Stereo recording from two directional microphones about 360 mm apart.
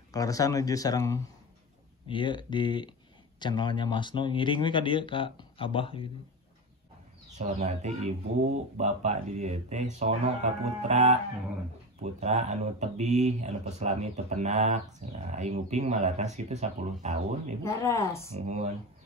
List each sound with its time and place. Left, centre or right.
0.1 s speech: centre
7.3 s speech: centre
17.6 s speech: centre
18.3 s speech: centre